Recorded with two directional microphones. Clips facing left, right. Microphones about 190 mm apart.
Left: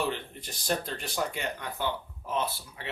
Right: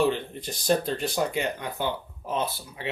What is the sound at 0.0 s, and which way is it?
Speech, 20° right (ahead or behind).